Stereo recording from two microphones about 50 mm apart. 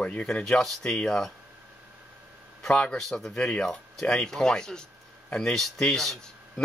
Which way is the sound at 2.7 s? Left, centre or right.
Centre.